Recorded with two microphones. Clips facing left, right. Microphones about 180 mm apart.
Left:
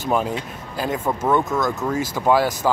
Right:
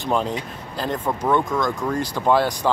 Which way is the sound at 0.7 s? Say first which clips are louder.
Left 1 dB; 10° left (ahead or behind).